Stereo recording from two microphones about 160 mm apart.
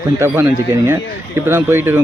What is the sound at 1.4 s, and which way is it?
Speech, 15° right (ahead or behind).